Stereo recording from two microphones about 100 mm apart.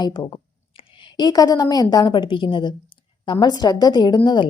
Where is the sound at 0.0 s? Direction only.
45° left (ahead or behind).